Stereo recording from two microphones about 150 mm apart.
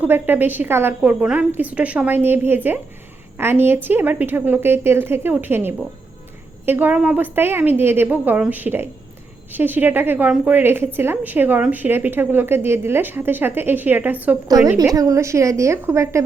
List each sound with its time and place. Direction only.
0.0 s a woman's voice: 15° right (ahead or behind)
14.4 s a woman's voice: 25° right (ahead or behind)